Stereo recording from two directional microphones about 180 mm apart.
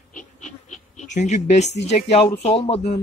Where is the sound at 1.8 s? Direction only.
35° left (ahead or behind).